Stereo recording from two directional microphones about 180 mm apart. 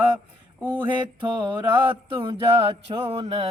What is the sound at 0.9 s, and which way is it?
Mantra, 25° right (ahead or behind).